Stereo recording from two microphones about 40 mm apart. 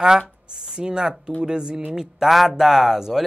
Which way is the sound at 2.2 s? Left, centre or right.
Centre.